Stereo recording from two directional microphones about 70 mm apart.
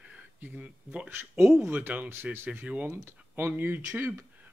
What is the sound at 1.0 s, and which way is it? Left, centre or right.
Speech, right.